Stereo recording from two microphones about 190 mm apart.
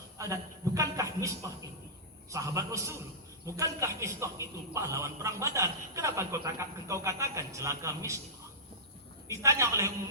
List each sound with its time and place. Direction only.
0.2 s a sound: 15° right (ahead or behind)
2.3 s a man's voice: 15° right (ahead or behind)
9.2 s a man's voice: 15° right (ahead or behind)